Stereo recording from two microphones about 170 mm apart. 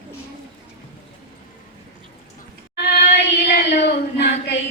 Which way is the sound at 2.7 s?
70° left (ahead or behind).